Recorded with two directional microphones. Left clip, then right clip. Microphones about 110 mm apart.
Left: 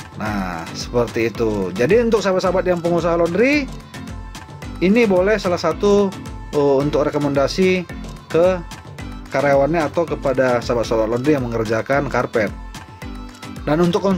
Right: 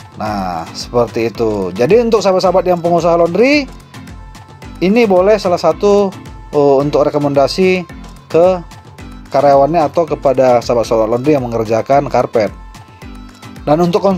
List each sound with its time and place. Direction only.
0.4 s speech: 15° right (ahead or behind)
4.7 s speech: 30° right (ahead or behind)
5.3 s speech: 20° right (ahead or behind)
13.7 s speech: 15° right (ahead or behind)